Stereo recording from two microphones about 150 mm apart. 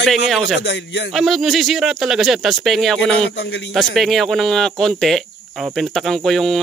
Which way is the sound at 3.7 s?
Centre (ahead or behind).